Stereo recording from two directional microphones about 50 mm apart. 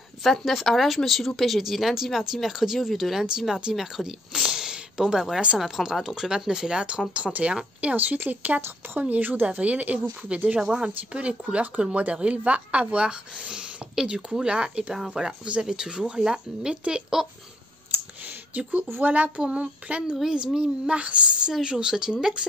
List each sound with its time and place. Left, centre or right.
0.2 s speech: centre; by 7.6 s right
7.8 s speech: right
9.0 s speech: right; by 17.3 s centre
18.2 s a sound: right
18.9 s speech: right; by 22.6 s centre